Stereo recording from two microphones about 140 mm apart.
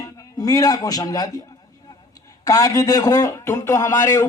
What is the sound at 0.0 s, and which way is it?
A man's voice, 25° left (ahead or behind).